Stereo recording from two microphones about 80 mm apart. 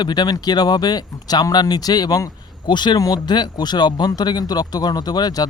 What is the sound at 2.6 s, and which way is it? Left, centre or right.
Speech, left.